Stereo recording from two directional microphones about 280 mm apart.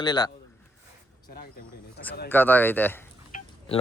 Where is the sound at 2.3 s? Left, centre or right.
Centre.